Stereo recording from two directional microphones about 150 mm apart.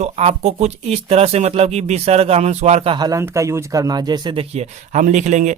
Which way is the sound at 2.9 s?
25° right (ahead or behind).